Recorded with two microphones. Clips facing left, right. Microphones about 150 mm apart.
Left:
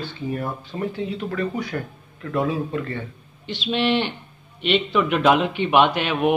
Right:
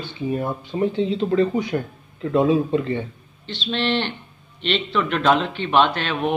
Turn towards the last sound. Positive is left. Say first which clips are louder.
# left 3 dB
turn(degrees=10)  # may be behind; listen again after turning